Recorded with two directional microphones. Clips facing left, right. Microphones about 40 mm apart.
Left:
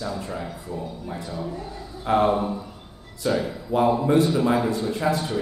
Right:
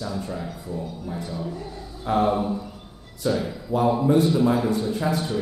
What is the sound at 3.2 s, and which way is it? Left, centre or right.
Speech, left.